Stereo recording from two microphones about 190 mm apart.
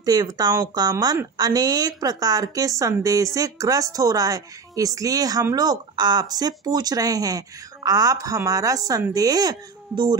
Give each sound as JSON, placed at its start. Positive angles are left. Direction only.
{"t": 0.0, "sound": "a woman's voice", "side_deg": -20}